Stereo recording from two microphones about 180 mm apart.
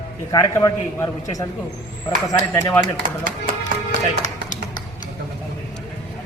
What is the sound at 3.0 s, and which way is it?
Speech, 45° right (ahead or behind).